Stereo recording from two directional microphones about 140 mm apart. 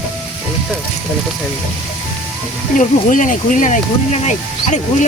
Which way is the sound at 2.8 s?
65° left (ahead or behind).